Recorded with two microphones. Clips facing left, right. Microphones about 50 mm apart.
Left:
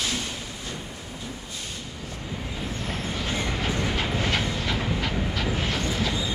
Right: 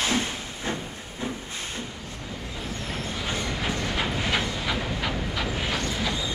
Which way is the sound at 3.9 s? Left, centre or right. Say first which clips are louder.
Even; centre.